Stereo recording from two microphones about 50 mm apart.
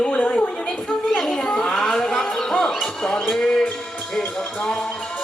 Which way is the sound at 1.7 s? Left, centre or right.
Centre.